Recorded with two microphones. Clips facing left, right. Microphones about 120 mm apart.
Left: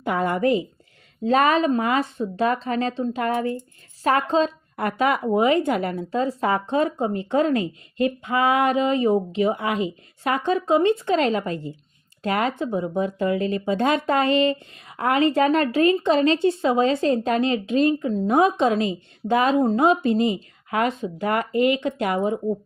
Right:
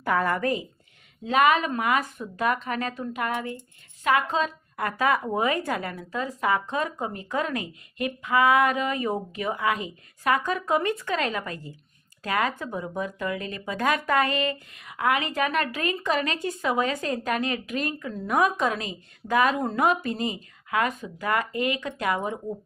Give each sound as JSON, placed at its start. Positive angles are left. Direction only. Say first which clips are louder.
{"t": 0.0, "sound": "speech", "louder": "left 3 dB", "side_deg": 20}
{"t": 1.2, "sound": "speech", "louder": "left 3 dB", "side_deg": 35}